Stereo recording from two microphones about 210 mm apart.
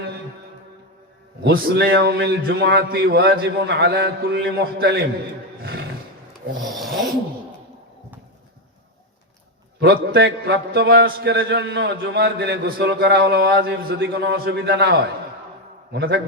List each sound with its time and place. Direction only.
1.4 s a man's voice: 50° right (ahead or behind)
6.7 s filing: centre (ahead or behind)
9.8 s a man's voice: 50° right (ahead or behind)